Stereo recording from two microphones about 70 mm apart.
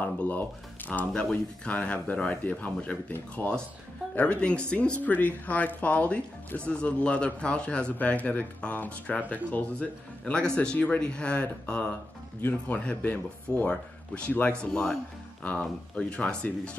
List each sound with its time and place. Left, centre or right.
0.0 s speech: left